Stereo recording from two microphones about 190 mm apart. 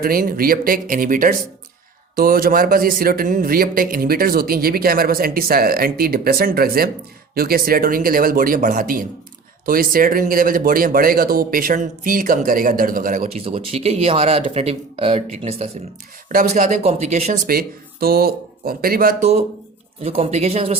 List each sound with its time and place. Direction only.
0.0 s speech: 50° right (ahead or behind); by 15.7 s 30° right (ahead or behind)
16.3 s speech: 45° right (ahead or behind)
17.4 s speech: 50° right (ahead or behind)
20.0 s speech: 35° right (ahead or behind)